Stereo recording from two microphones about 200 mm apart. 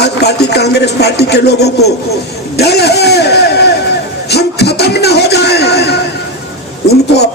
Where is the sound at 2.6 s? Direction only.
55° left (ahead or behind).